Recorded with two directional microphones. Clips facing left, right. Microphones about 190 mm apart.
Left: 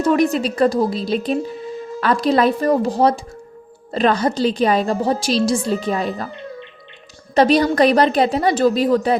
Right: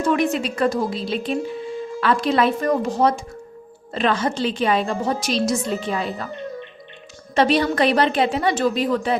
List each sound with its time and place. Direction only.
0.0 s a woman's voice: 40° left (ahead or behind)
7.3 s a woman's voice: 40° left (ahead or behind)